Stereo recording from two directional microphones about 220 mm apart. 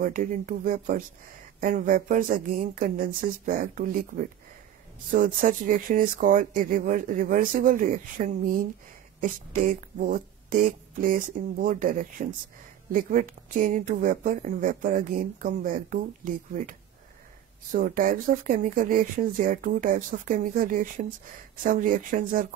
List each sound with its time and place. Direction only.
0.0 s a woman's voice: 35° right (ahead or behind)